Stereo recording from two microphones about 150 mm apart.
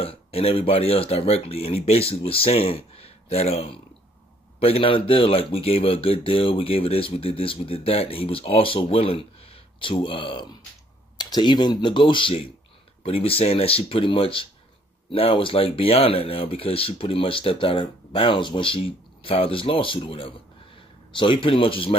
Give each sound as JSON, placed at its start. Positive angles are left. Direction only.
{"t": 0.0, "sound": "speech", "side_deg": 40}